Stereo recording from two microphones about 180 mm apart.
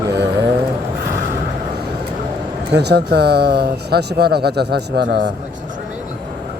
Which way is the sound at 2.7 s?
65° right (ahead or behind).